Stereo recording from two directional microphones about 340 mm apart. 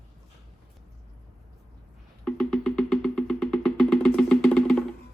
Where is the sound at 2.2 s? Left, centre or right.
Centre.